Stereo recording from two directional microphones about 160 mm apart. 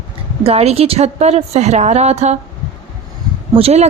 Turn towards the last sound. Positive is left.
turn(degrees=-40)  # may be behind; listen again after turning